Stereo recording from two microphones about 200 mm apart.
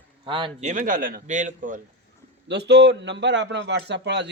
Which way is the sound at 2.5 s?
60° right (ahead or behind).